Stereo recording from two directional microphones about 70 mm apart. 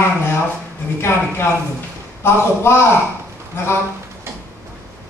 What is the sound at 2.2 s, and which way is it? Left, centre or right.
Speech, left.